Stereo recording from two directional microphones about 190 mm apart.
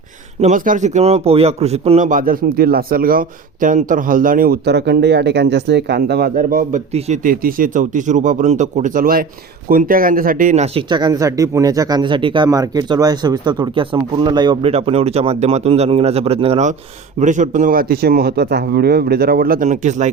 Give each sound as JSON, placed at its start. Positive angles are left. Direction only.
{"t": 0.4, "sound": "speech", "side_deg": -45}
{"t": 10.8, "sound": "speech", "side_deg": -25}